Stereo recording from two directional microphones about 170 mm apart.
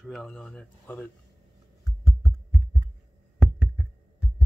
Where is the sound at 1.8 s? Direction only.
15° left (ahead or behind).